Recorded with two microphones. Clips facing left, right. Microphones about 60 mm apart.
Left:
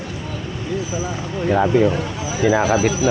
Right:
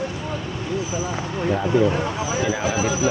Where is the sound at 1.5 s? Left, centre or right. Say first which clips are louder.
Left 4 dB; left.